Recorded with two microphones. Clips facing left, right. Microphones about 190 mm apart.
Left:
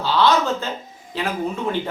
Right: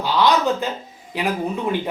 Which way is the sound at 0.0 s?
15° right (ahead or behind).